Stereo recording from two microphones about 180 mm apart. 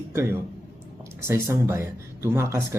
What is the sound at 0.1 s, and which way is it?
A man's voice, 15° right (ahead or behind).